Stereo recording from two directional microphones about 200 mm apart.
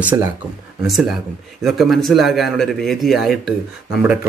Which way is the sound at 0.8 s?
Centre (ahead or behind).